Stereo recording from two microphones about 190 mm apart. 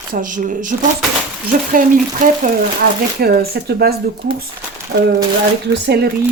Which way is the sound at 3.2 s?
55° right (ahead or behind).